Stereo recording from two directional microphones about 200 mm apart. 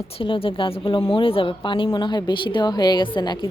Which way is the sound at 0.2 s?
25° left (ahead or behind).